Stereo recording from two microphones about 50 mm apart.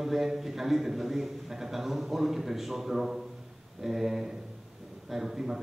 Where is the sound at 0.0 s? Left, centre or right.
Centre.